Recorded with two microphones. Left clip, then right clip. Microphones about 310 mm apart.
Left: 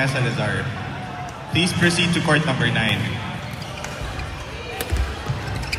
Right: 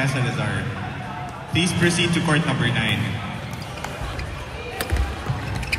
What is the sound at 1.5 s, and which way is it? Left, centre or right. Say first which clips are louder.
A man's voice: left 2 dB; left.